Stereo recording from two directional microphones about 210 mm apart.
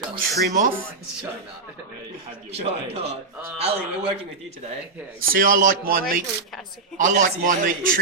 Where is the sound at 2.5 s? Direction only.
30° right (ahead or behind).